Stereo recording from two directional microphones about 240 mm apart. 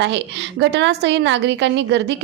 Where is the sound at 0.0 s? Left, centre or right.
Right.